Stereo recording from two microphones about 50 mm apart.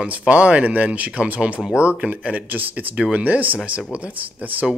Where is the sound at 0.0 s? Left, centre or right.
Right.